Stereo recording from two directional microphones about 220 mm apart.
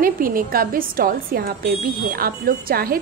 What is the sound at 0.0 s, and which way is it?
A woman's voice, 40° right (ahead or behind).